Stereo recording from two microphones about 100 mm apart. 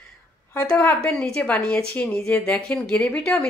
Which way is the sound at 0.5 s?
20° left (ahead or behind).